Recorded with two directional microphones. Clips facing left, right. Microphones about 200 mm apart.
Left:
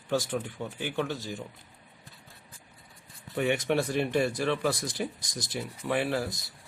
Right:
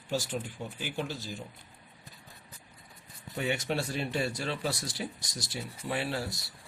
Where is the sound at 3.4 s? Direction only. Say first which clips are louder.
Left 5 dB; 60° left (ahead or behind).